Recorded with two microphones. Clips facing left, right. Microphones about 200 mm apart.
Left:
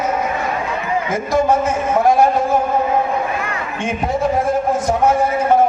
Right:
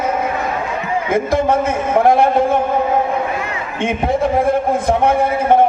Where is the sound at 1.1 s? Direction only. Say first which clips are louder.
Right 1 dB; 55° right (ahead or behind).